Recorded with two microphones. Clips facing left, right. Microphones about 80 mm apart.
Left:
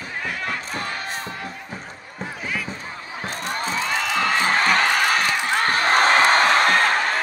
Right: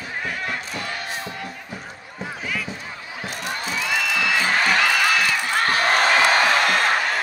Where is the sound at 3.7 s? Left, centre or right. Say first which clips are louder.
Even; left.